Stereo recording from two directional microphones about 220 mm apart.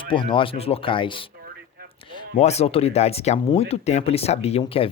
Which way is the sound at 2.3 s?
30° left (ahead or behind).